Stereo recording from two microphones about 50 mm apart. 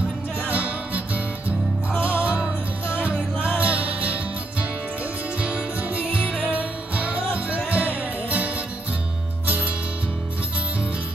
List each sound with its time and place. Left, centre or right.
0.5 s music: right